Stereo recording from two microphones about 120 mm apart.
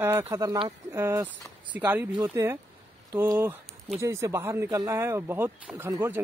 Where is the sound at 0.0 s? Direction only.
20° right (ahead or behind).